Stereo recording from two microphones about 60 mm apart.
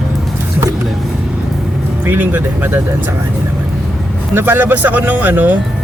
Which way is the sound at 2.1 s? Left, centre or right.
Right.